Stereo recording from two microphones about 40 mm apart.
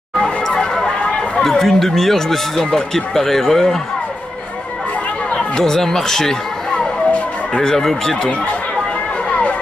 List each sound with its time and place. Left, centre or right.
0.2 s a sound: left
0.8 s speech: centre
5.6 s speech: centre
7.6 s speech: centre